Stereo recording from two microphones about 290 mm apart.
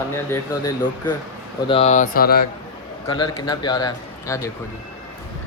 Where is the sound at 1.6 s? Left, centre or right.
Centre.